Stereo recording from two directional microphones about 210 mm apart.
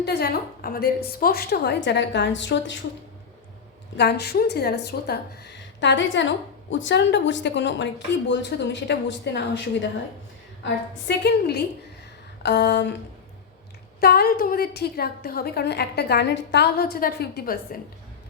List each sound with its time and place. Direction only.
0.0 s a woman's voice: 50° left (ahead or behind)
3.9 s speech: 50° left (ahead or behind)
11.1 s a woman's voice: 50° left (ahead or behind)
14.0 s a woman's voice: 45° left (ahead or behind)